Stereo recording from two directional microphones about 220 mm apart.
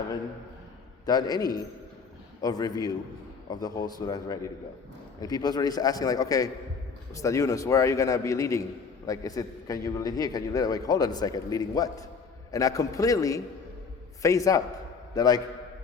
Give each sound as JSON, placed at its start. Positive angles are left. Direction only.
{"t": 1.0, "sound": "a man's voice", "side_deg": 15}